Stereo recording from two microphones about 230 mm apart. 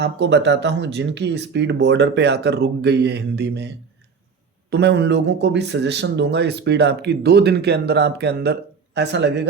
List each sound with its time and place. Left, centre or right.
0.0 s speech: right
4.7 s speech: right